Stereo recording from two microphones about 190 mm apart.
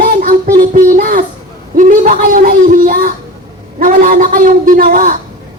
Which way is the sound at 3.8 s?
45° right (ahead or behind).